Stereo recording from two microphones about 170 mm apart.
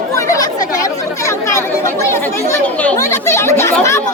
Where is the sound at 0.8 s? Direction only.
15° left (ahead or behind).